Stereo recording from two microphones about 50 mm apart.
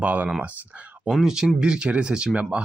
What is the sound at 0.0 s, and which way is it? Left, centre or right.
Speech, right.